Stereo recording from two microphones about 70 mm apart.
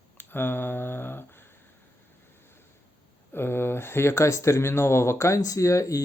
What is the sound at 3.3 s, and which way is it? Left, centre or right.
Speech, left.